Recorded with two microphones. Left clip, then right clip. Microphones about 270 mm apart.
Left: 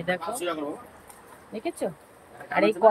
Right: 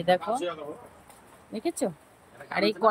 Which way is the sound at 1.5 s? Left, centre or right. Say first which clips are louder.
Right 1 dB; centre.